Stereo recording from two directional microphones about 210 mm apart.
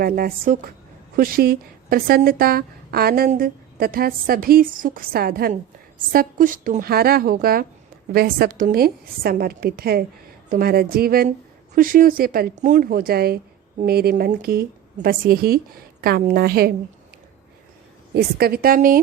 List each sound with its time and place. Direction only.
0.0 s a woman's voice: 45° right (ahead or behind)
18.1 s a woman's voice: 45° right (ahead or behind)